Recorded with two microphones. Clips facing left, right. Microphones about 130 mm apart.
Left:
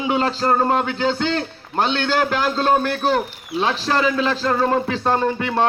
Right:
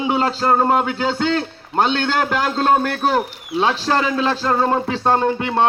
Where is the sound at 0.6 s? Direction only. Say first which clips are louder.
Right 1 dB; 10° right (ahead or behind).